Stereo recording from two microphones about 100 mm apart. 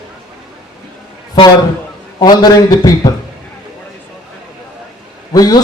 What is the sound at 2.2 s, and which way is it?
Speech, 45° left (ahead or behind).